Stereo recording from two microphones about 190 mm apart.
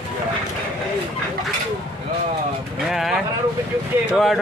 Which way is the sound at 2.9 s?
Centre (ahead or behind).